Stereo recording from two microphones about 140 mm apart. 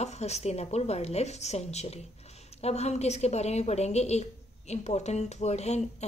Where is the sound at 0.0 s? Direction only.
50° left (ahead or behind).